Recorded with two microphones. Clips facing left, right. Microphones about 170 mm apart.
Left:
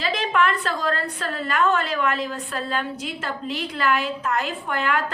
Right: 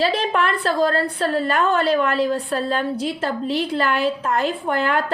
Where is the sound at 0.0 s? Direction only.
30° right (ahead or behind).